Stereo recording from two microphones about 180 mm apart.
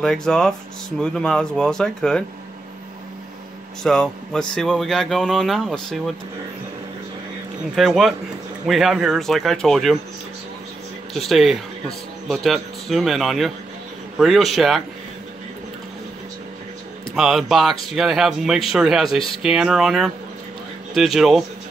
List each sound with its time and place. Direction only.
0.0 s speech: 5° left (ahead or behind)
3.8 s speech: 5° left (ahead or behind)
7.7 s speech: centre (ahead or behind)
11.1 s speech: centre (ahead or behind)
17.1 s speech: centre (ahead or behind)